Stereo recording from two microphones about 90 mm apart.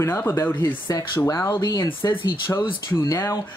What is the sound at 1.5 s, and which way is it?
Speech, 50° left (ahead or behind).